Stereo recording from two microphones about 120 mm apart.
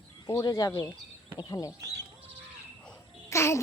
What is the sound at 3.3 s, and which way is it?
Babbling, 25° left (ahead or behind).